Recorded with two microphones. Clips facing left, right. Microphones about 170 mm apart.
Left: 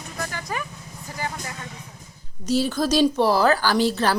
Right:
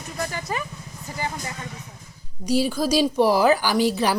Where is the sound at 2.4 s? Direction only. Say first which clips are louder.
Even; 10° right (ahead or behind).